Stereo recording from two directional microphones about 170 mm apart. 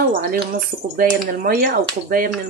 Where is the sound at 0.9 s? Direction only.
60° right (ahead or behind).